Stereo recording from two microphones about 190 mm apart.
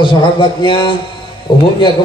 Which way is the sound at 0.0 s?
25° left (ahead or behind).